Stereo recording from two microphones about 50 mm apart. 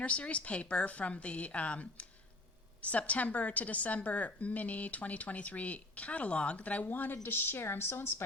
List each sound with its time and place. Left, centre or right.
0.0 s speech: left
6.8 s a woman's voice: left